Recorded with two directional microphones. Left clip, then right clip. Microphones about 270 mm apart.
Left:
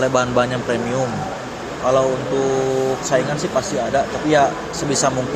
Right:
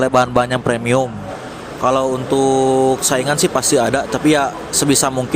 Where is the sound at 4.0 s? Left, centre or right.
Right.